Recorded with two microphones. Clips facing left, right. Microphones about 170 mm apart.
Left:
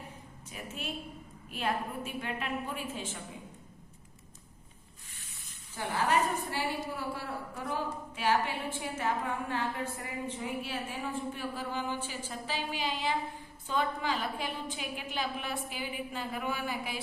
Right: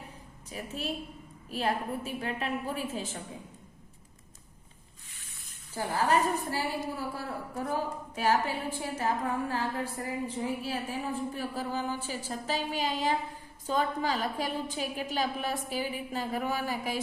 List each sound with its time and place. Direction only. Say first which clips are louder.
0.5 s a woman's voice: right 4 dB; 35° right (ahead or behind)
5.7 s a woman's voice: right 2 dB; 40° right (ahead or behind)